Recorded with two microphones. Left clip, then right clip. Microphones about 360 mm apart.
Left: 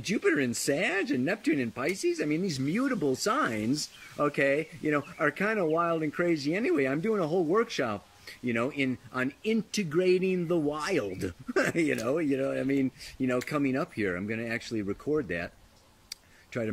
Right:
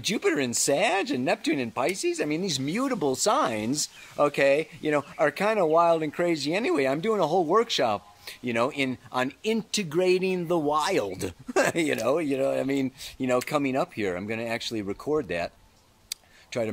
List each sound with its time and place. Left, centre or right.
0.0 s speech: centre
14.9 s speech: right
15.2 s speech: centre